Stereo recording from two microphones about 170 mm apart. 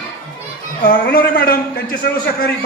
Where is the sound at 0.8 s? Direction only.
60° left (ahead or behind).